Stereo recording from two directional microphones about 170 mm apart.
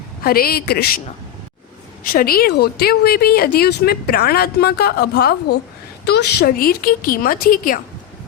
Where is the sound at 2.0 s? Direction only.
60° left (ahead or behind).